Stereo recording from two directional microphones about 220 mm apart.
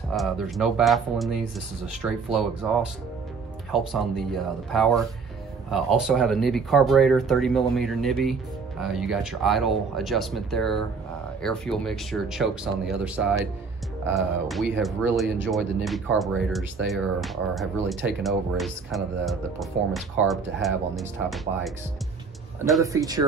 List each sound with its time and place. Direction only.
0.1 s speech: centre (ahead or behind)
3.7 s speech: centre (ahead or behind)
22.8 s speech: 15° right (ahead or behind)